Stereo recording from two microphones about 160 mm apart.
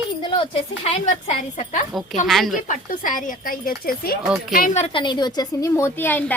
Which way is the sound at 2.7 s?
55° left (ahead or behind).